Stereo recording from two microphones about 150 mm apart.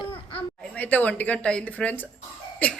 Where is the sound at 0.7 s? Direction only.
10° left (ahead or behind).